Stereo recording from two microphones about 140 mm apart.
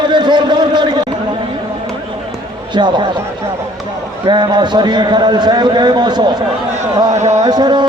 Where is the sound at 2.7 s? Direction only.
35° right (ahead or behind).